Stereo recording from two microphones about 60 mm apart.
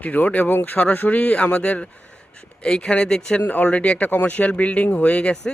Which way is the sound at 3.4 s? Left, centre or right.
Left.